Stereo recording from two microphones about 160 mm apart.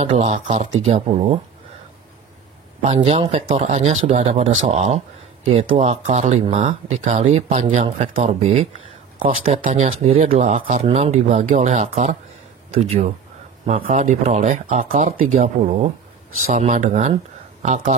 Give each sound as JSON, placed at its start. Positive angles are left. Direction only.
{"t": 0.2, "sound": "speech", "side_deg": -40}
{"t": 2.8, "sound": "speech", "side_deg": -40}
{"t": 13.8, "sound": "speech", "side_deg": -55}
{"t": 15.6, "sound": "speech", "side_deg": -35}
{"t": 16.4, "sound": "speech", "side_deg": -50}